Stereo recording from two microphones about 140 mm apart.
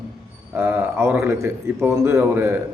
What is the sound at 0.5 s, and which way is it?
A man's voice, 15° right (ahead or behind).